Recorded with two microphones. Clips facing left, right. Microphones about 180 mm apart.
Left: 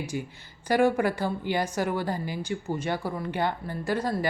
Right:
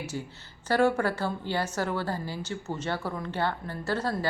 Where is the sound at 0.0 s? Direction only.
15° left (ahead or behind).